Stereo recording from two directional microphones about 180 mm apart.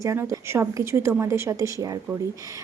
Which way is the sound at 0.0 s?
15° right (ahead or behind).